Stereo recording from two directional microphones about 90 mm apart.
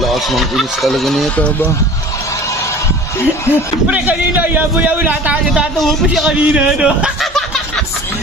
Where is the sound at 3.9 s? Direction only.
15° right (ahead or behind).